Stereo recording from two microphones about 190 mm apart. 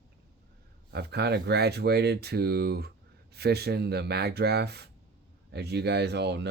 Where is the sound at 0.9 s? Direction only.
60° right (ahead or behind).